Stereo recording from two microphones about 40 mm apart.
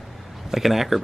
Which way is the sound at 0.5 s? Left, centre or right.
Centre.